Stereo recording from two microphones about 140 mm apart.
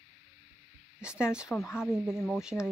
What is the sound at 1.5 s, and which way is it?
Speech, 20° left (ahead or behind).